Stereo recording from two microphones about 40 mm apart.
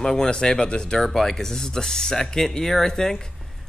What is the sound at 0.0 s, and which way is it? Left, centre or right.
Speech, centre.